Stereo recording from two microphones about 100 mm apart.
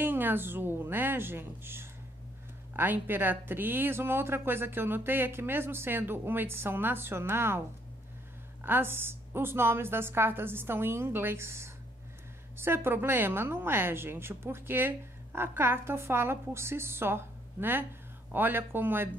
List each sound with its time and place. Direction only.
0.0 s a woman's voice: 20° right (ahead or behind)
8.6 s a woman's voice: 20° right (ahead or behind)